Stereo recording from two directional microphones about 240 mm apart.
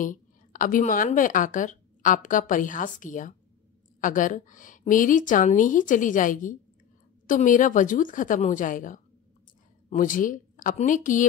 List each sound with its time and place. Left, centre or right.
0.0 s a woman's voice: left